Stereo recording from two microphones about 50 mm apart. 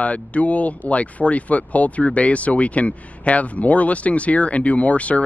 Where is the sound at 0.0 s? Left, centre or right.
Left.